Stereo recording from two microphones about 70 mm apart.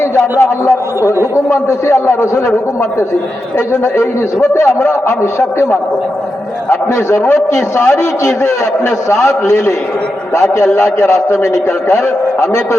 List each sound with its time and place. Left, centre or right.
0.3 s a man's voice: left
3.7 s a man's voice: left
6.7 s a man's voice: left